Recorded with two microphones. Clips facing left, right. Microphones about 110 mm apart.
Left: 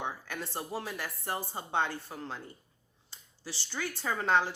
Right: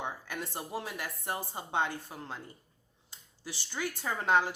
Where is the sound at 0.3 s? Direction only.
15° right (ahead or behind).